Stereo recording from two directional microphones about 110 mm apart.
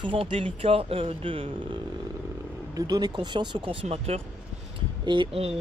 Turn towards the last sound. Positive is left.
turn(degrees=-60)  # may be behind; listen again after turning